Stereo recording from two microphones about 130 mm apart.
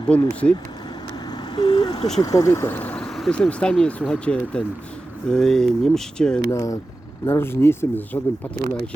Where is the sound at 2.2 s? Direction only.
25° left (ahead or behind); by 6.4 s 5° left (ahead or behind).